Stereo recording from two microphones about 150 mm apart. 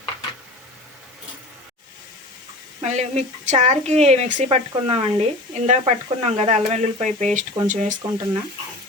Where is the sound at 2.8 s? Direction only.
50° right (ahead or behind).